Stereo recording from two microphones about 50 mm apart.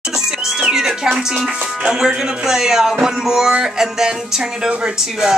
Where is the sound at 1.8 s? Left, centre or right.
Centre.